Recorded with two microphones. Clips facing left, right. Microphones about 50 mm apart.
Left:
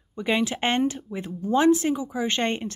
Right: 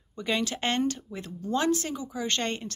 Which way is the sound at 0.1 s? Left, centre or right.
Centre.